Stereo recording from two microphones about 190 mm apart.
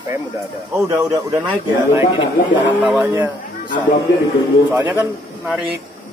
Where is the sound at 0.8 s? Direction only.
15° right (ahead or behind).